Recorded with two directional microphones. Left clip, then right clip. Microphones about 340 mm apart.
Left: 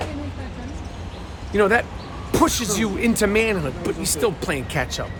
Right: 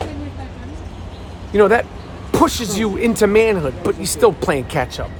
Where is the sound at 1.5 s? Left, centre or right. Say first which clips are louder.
Right 5 dB; centre.